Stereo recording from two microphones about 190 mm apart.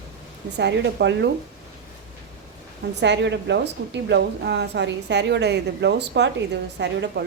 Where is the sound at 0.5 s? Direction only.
65° right (ahead or behind).